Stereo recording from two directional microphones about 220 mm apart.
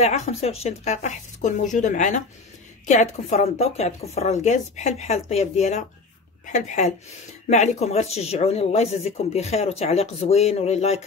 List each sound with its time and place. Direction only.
0.0 s a woman's voice: 30° left (ahead or behind)